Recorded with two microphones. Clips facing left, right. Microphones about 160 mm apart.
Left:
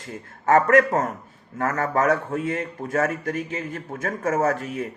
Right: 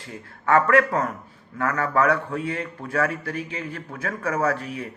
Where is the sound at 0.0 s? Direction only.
40° left (ahead or behind).